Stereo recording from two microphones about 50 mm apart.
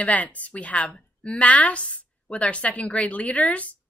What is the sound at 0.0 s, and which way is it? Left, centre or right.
A woman's voice, left.